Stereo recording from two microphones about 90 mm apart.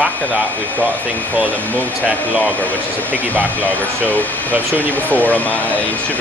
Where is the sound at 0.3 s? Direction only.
20° left (ahead or behind).